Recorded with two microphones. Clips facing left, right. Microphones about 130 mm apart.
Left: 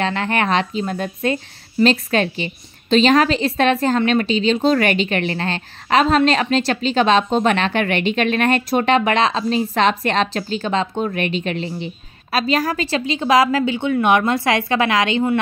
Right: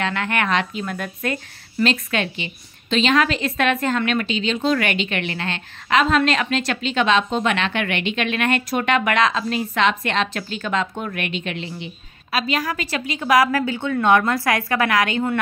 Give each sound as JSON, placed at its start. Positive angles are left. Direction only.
{"t": 0.0, "sound": "a woman's voice", "side_deg": 30}